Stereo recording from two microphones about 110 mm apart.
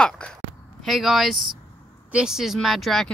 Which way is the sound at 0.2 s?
10° left (ahead or behind).